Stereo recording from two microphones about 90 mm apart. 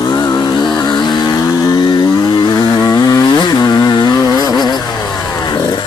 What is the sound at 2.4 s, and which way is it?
Chainsaw, 50° left (ahead or behind).